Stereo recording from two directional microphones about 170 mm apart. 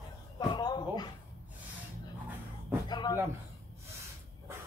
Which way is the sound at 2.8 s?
25° left (ahead or behind).